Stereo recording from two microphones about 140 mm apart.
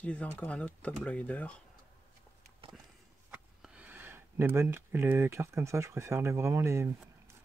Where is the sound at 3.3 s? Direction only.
10° right (ahead or behind).